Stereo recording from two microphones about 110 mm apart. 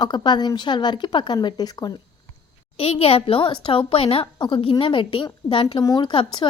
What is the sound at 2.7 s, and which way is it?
Speech, 60° left (ahead or behind).